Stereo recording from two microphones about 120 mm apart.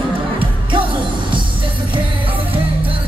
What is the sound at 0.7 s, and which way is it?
Music, 45° right (ahead or behind).